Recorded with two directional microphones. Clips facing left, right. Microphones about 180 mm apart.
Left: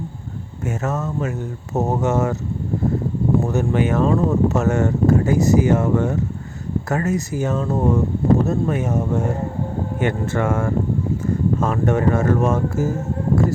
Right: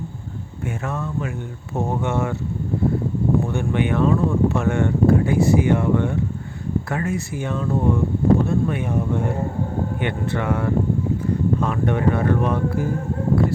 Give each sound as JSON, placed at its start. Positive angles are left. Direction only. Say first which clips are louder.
{"t": 0.9, "sound": "speech", "louder": "left 4 dB", "side_deg": 40}
{"t": 3.4, "sound": "speech", "louder": "left 3 dB", "side_deg": 40}